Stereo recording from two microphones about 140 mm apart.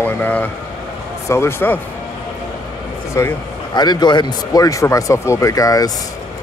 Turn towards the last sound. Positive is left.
turn(degrees=25)  # may be behind; listen again after turning